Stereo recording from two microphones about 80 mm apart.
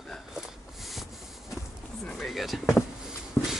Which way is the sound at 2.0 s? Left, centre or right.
Centre.